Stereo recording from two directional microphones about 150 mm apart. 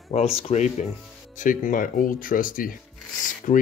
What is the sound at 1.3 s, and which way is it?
Speech, 60° left (ahead or behind).